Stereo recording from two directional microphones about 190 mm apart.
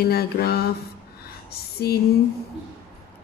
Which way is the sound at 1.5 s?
55° left (ahead or behind).